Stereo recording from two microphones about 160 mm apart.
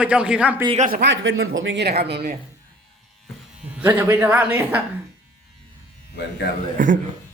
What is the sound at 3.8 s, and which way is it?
A man's voice, 15° right (ahead or behind).